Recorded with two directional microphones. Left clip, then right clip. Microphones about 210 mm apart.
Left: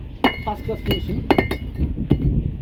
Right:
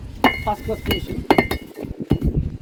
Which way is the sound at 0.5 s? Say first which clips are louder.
Right 1 dB; 25° right (ahead or behind).